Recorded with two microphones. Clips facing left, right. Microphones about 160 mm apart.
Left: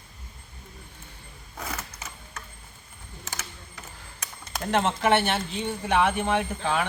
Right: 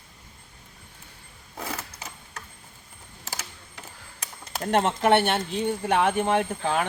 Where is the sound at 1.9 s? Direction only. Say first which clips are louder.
Even; 35° right (ahead or behind).